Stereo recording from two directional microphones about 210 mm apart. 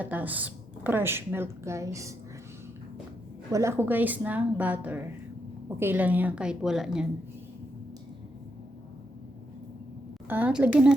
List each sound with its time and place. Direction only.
0.0 s a woman's voice: 10° right (ahead or behind)
3.5 s a woman's voice: 15° right (ahead or behind)
10.2 s a woman's voice: 10° right (ahead or behind)